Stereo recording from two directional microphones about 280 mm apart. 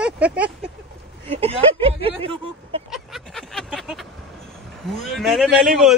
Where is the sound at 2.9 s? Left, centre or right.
Centre.